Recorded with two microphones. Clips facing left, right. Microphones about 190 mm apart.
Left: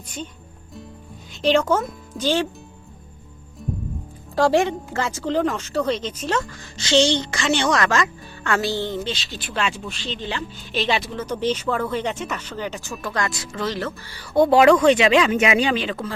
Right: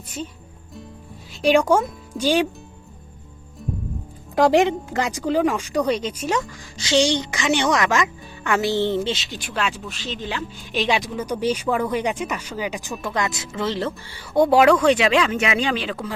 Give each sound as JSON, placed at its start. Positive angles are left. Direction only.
{"t": 1.4, "sound": "speech", "side_deg": -10}
{"t": 4.4, "sound": "speech", "side_deg": -20}
{"t": 9.5, "sound": "speech", "side_deg": 0}
{"t": 14.4, "sound": "speech", "side_deg": -5}
{"t": 15.3, "sound": "speech", "side_deg": 15}
{"t": 15.6, "sound": "speech", "side_deg": 0}